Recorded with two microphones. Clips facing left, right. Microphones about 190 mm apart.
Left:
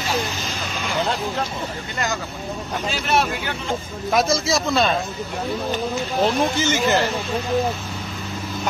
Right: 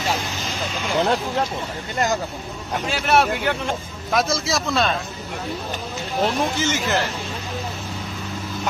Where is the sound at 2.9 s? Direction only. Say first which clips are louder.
Right 3 dB; 65° right (ahead or behind).